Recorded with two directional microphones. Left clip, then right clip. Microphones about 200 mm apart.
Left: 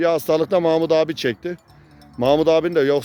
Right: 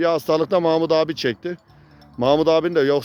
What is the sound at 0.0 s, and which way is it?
Speech, 5° right (ahead or behind).